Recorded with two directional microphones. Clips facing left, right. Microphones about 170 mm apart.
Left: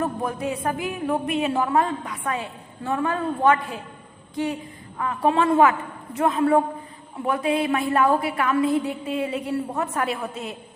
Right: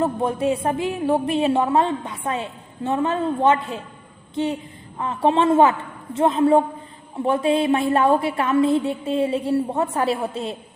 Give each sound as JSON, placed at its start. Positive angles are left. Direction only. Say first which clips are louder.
{"t": 0.0, "sound": "a woman's voice", "louder": "right 5 dB", "side_deg": -25}
{"t": 4.9, "sound": "a woman's voice", "louder": "right 2 dB", "side_deg": -25}